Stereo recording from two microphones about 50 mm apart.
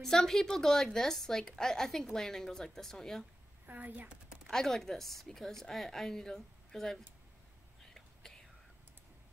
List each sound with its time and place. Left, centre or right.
0.0 s a woman's voice: centre
3.6 s a woman's voice: right
4.5 s a woman's voice: centre
7.8 s whispering: centre